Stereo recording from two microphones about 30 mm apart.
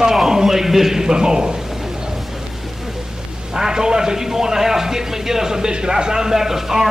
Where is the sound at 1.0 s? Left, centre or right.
Right.